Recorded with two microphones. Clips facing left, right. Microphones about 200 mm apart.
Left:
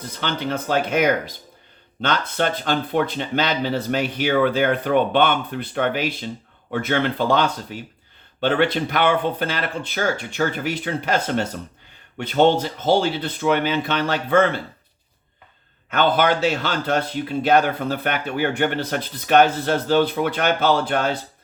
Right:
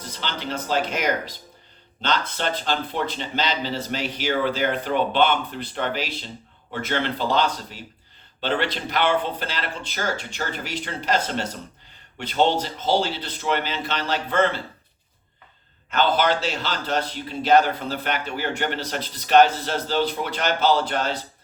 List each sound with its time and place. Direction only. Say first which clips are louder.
0.1 s speech: left 5 dB; 55° left (ahead or behind)
15.9 s speech: left 2 dB; 55° left (ahead or behind)